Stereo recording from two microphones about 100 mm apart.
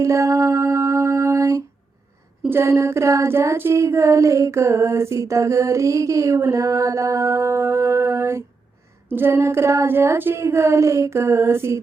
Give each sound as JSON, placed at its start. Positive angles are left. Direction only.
{"t": 0.0, "sound": "music", "side_deg": -30}
{"t": 2.5, "sound": "child singing", "side_deg": -25}